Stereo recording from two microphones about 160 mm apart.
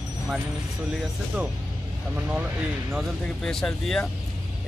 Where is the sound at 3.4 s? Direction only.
5° left (ahead or behind).